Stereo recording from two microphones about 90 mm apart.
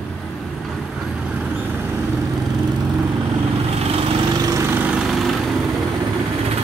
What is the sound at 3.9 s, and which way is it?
Lawn mower, 90° right.